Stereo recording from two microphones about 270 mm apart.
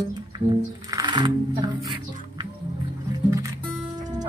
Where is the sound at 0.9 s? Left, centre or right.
Centre.